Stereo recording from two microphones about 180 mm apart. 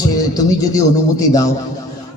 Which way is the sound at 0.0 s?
20° left (ahead or behind).